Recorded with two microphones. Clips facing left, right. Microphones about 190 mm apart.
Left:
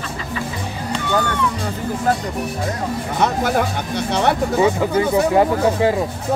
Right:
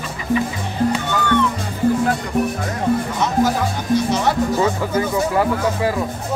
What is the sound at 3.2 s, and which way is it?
Speech, 60° left (ahead or behind).